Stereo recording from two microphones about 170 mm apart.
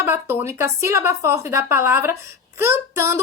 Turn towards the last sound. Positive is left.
turn(degrees=-15)  # may be behind; listen again after turning